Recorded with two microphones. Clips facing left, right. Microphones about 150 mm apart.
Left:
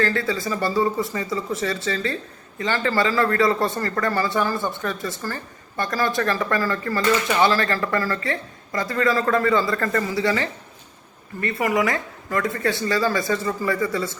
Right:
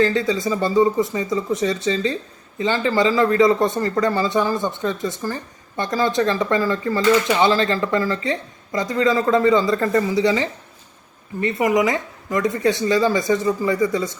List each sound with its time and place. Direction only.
0.0 s a man's voice: 20° right (ahead or behind)